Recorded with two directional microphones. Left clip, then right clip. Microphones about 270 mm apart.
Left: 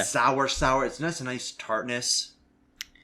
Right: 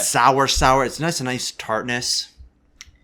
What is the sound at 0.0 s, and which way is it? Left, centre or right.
Speech, right.